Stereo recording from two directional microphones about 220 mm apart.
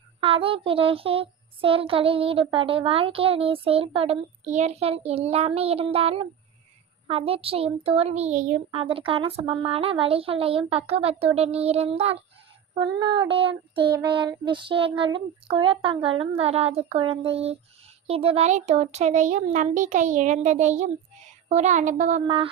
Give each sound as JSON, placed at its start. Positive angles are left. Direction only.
{"t": 0.2, "sound": "child singing", "side_deg": -25}
{"t": 18.1, "sound": "a child's voice", "side_deg": -25}